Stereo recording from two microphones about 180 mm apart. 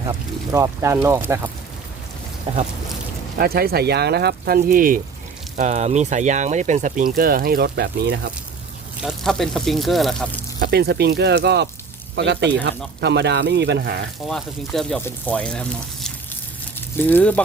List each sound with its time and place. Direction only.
0.5 s speech: 15° right (ahead or behind)
3.3 s speech: 55° right (ahead or behind)
5.5 s speech: 40° right (ahead or behind); by 8.3 s 70° right (ahead or behind)
9.0 s speech: centre (ahead or behind)
10.6 s speech: 60° right (ahead or behind)
14.3 s speech: centre (ahead or behind)